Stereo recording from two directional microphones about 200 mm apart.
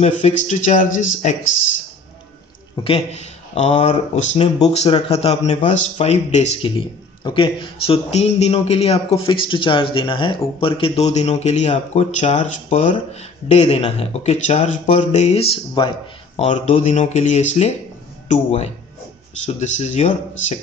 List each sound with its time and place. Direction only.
0.0 s speech: 35° left (ahead or behind)
2.7 s speech: 25° left (ahead or behind)
16.4 s speech: 35° left (ahead or behind)